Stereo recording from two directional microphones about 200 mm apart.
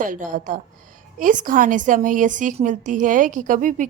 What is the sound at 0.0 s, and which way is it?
A woman's voice, 40° right (ahead or behind).